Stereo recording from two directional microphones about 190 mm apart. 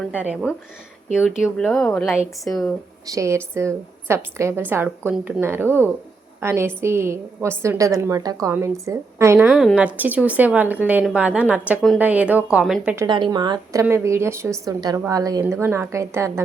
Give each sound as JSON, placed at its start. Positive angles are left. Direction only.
{"t": 0.1, "sound": "a woman's voice", "side_deg": -5}
{"t": 3.1, "sound": "a woman's voice", "side_deg": -15}
{"t": 9.5, "sound": "a woman's voice", "side_deg": -5}
{"t": 13.1, "sound": "a woman's voice", "side_deg": -25}